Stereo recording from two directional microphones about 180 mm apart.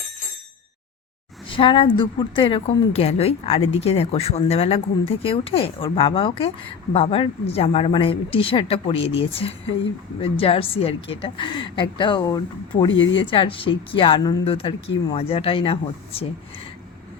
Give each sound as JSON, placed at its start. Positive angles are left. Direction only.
{"t": 1.5, "sound": "a woman's voice", "side_deg": 30}